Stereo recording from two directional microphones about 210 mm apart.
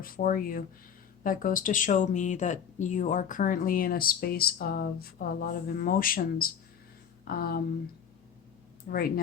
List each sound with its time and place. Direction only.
0.0 s speech: 40° left (ahead or behind)
8.9 s speech: 45° left (ahead or behind)